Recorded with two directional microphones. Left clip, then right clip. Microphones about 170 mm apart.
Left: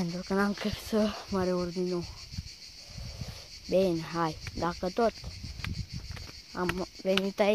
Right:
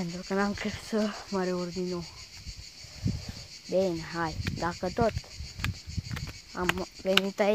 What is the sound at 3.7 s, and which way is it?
Speech, 45° left (ahead or behind).